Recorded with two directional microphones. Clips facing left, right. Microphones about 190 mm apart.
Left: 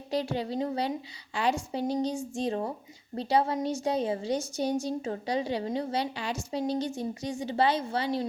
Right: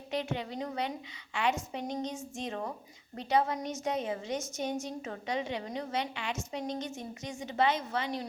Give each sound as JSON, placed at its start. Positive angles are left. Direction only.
{"t": 0.1, "sound": "a woman's voice", "side_deg": 35}